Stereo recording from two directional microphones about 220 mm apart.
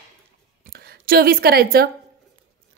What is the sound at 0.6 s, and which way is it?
A woman's voice, 45° right (ahead or behind).